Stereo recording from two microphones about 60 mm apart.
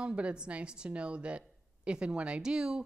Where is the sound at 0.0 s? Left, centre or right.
Centre.